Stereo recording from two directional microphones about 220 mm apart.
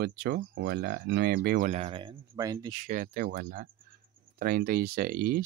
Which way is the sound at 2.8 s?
35° right (ahead or behind).